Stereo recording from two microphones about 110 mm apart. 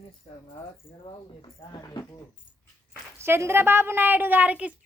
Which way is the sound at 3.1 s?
25° right (ahead or behind).